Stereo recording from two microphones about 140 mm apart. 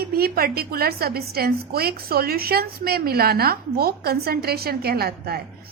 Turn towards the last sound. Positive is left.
turn(degrees=-90)